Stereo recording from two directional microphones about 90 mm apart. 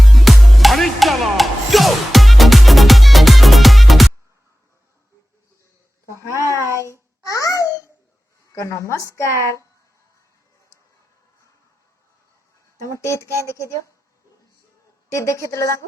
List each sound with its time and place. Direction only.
0.0 s music: centre (ahead or behind)
6.8 s babbling: 35° left (ahead or behind)
8.5 s speech: 35° left (ahead or behind)
12.7 s speech: 35° left (ahead or behind)
15.1 s a woman's voice: 35° left (ahead or behind)